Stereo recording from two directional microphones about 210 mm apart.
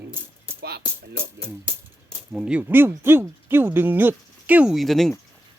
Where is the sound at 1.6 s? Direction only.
Centre (ahead or behind).